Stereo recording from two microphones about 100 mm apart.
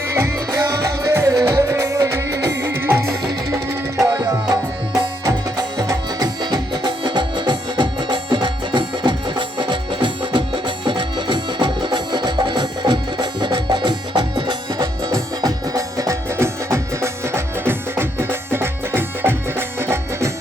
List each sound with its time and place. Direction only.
0.1 s music: 30° right (ahead or behind)
3.5 s music: 35° right (ahead or behind)
5.7 s music: 40° right (ahead or behind)
15.0 s music: 35° right (ahead or behind)